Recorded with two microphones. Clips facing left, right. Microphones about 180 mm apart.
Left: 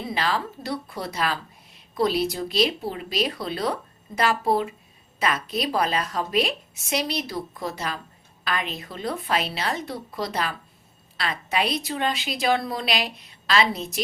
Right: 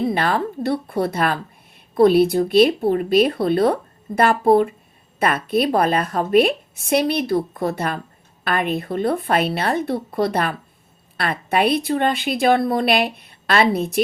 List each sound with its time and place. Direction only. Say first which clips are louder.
0.0 s a woman's voice: right 7 dB; 55° right (ahead or behind)